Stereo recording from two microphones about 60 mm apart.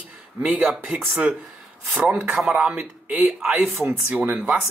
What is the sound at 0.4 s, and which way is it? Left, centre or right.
Speech, right.